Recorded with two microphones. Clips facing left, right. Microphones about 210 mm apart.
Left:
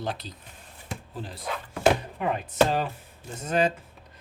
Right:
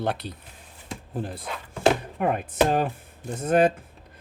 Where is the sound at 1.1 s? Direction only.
55° right (ahead or behind).